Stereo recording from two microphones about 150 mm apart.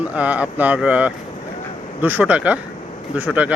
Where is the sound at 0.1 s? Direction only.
10° right (ahead or behind).